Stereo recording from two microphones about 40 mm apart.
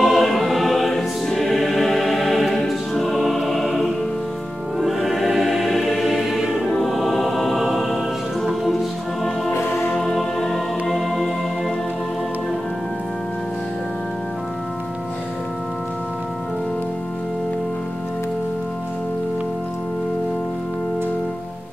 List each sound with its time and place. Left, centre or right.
0.0 s choir: centre
2.9 s music: centre
6.6 s music: centre
9.9 s music: centre
10.9 s music: centre